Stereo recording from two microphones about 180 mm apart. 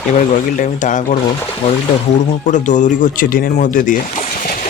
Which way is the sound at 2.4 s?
45° left (ahead or behind).